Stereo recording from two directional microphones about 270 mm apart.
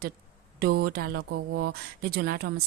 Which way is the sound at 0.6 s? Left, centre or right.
Right.